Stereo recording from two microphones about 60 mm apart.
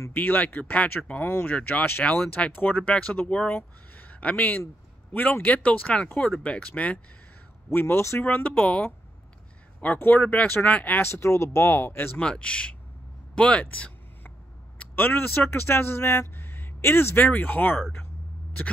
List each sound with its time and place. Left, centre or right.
0.1 s speech: left
1.2 s speech: left
1.5 s speech: left
2.9 s speech: centre
7.7 s speech: left
8.2 s speech: left
9.9 s speech: left
10.7 s speech: left
11.0 s speech: left
12.2 s speech: centre
14.8 s speech: left
17.2 s speech: left